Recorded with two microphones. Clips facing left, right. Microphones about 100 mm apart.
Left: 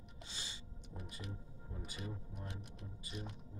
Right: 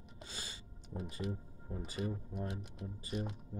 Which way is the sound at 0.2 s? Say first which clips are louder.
Right 3 dB; 40° right (ahead or behind).